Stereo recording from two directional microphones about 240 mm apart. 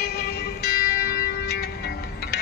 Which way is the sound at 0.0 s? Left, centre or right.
Left.